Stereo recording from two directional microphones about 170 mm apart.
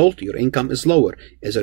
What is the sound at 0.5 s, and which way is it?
Speech, 40° right (ahead or behind).